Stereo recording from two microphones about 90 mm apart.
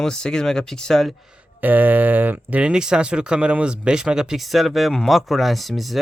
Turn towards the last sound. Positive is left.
turn(degrees=0)  # may be behind; listen again after turning